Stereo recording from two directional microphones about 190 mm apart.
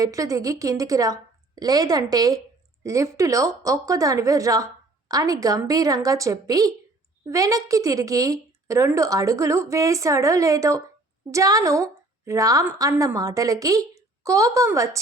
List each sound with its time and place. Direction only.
0.0 s a woman's voice: 15° right (ahead or behind)